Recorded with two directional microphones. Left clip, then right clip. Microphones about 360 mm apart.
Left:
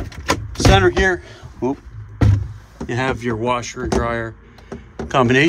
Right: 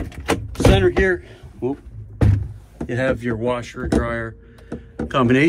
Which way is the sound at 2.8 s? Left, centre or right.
Centre.